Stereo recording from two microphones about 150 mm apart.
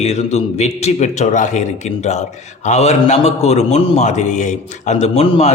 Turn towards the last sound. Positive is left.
turn(degrees=50)  # may be behind; listen again after turning